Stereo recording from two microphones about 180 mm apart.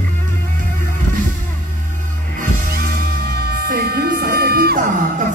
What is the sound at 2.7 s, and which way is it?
Music, 60° right (ahead or behind).